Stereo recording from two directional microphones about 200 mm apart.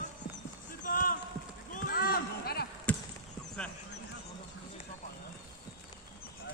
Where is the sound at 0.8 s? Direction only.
45° left (ahead or behind).